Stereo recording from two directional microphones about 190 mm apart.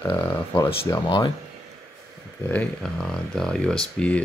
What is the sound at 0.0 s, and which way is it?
Speech, 15° left (ahead or behind).